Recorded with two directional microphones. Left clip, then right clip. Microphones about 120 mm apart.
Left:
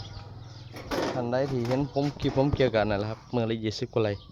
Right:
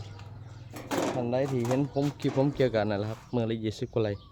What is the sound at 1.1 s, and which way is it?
Speech, 10° right (ahead or behind).